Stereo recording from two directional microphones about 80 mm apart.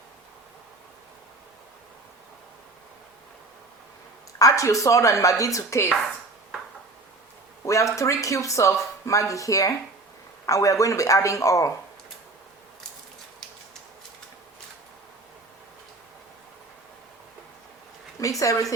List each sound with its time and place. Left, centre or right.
4.4 s speech: left
7.6 s speech: left
18.2 s speech: left